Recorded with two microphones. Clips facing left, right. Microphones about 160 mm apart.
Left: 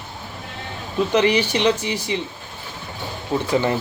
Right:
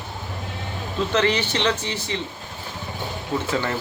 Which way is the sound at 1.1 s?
15° left (ahead or behind).